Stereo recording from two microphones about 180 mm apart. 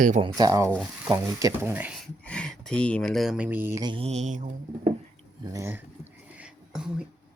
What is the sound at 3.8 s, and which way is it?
Speech, 30° right (ahead or behind).